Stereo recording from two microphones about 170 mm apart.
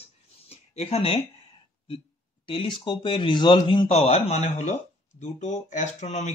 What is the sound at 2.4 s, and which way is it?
Speech, 30° left (ahead or behind).